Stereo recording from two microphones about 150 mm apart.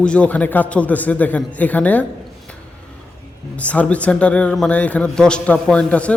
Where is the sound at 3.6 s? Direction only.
10° left (ahead or behind).